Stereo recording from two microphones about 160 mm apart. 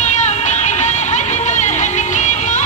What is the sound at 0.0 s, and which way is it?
Music, 45° left (ahead or behind).